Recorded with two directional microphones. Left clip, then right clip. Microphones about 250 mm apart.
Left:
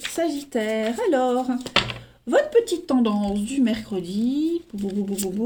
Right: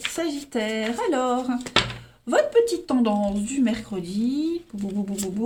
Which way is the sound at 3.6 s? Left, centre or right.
Centre.